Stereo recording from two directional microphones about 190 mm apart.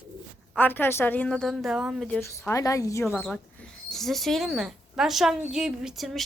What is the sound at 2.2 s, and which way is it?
Speech, 15° left (ahead or behind).